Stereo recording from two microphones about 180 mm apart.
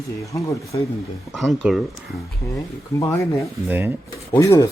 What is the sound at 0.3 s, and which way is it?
Speech, 15° left (ahead or behind).